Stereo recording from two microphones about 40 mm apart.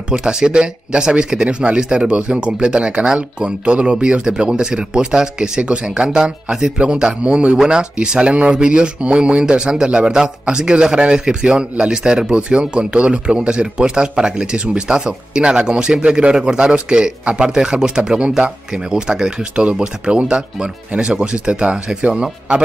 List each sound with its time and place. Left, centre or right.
0.1 s speech: right